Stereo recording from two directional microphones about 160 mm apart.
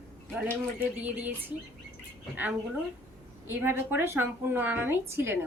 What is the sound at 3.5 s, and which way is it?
A woman's voice, 10° right (ahead or behind).